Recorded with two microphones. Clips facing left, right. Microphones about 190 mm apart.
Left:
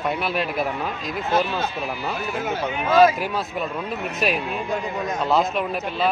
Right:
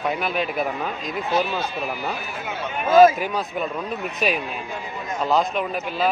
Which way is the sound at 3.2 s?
5° left (ahead or behind).